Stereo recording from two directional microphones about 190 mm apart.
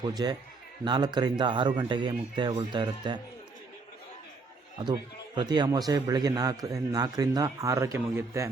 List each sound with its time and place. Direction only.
0.0 s a man's voice: 20° right (ahead or behind)
4.8 s a man's voice: 25° right (ahead or behind)